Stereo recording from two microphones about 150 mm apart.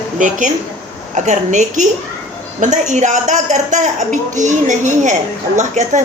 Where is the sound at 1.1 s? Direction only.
55° right (ahead or behind).